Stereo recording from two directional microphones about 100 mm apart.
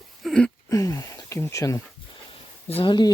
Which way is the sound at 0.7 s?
35° left (ahead or behind).